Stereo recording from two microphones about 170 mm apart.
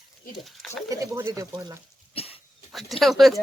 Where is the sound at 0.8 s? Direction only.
20° right (ahead or behind).